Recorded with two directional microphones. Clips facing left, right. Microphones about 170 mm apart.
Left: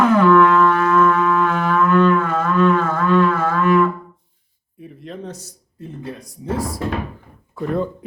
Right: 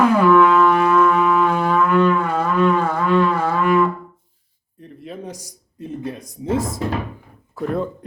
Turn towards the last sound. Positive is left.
turn(degrees=0)  # may be behind; listen again after turning